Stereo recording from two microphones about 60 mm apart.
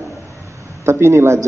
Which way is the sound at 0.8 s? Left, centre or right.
Right.